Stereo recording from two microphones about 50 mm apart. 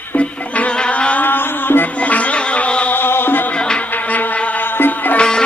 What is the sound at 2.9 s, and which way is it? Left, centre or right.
Music, left.